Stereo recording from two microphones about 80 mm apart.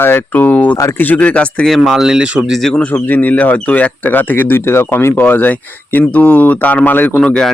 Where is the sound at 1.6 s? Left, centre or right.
Centre.